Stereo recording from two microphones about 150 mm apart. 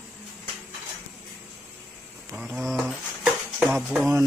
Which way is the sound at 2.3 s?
Centre (ahead or behind).